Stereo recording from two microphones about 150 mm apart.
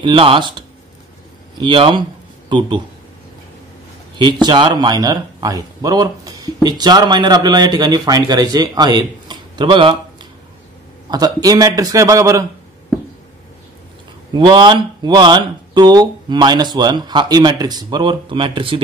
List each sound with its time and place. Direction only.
0.0 s speech: 35° right (ahead or behind)
4.2 s speech: 30° right (ahead or behind)
11.1 s speech: 25° right (ahead or behind)
14.3 s speech: 30° right (ahead or behind)